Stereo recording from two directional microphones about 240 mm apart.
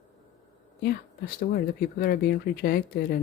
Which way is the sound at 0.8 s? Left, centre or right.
Left.